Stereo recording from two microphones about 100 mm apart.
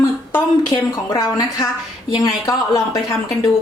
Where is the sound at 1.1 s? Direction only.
35° left (ahead or behind).